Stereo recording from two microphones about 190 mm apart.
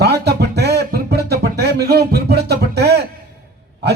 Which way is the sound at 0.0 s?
60° right (ahead or behind).